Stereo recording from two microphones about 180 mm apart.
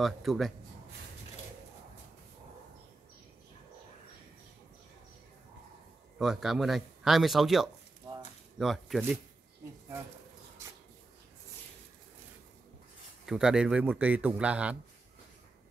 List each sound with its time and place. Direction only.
0.0 s speech: centre (ahead or behind)
6.1 s speech: centre (ahead or behind)
8.0 s a sound: 25° right (ahead or behind)
8.5 s speech: centre (ahead or behind)
13.2 s a man's voice: centre (ahead or behind)